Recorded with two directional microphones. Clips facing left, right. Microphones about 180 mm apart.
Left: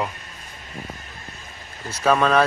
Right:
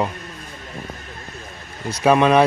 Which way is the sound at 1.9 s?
15° right (ahead or behind).